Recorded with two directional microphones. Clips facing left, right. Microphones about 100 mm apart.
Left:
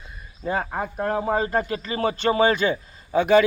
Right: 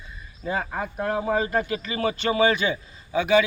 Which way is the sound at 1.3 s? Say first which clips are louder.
Left 1 dB; 35° left (ahead or behind).